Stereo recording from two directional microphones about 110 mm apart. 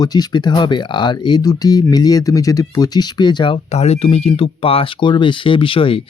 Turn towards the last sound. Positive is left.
turn(degrees=55)  # may be behind; listen again after turning